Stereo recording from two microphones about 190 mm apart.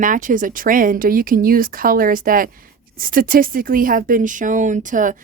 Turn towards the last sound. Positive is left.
turn(degrees=-45)  # may be behind; listen again after turning